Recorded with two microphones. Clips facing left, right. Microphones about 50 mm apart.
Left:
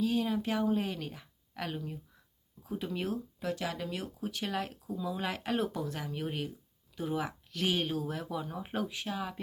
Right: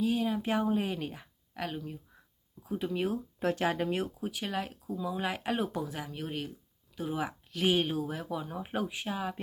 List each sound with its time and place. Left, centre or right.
0.0 s speech: centre
0.4 s a woman's voice: right
1.5 s speech: centre
3.4 s speech: right
4.2 s speech: centre